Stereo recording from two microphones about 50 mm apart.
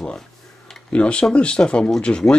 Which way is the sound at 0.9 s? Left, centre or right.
Left.